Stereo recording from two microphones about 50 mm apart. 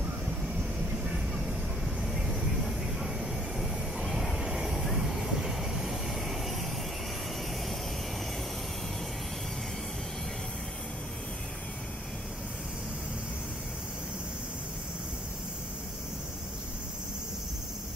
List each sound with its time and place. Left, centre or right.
1.0 s vehicle: centre